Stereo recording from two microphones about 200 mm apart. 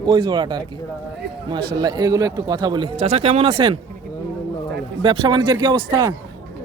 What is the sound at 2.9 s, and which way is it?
Speech, 30° right (ahead or behind).